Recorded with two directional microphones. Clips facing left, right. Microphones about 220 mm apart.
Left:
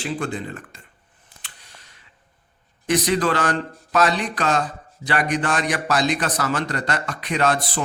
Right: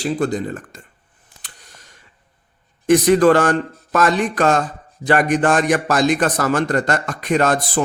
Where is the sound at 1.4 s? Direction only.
45° right (ahead or behind).